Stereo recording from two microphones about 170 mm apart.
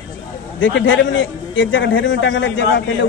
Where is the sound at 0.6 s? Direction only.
90° left.